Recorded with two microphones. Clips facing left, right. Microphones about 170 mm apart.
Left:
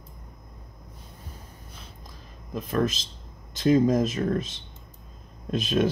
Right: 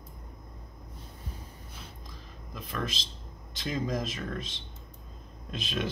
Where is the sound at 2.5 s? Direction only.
45° left (ahead or behind).